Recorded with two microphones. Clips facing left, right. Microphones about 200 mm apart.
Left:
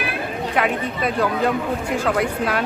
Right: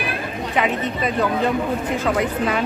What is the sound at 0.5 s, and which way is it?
Speech, centre (ahead or behind).